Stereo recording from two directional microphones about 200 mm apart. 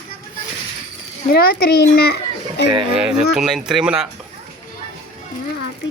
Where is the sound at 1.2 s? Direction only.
50° left (ahead or behind).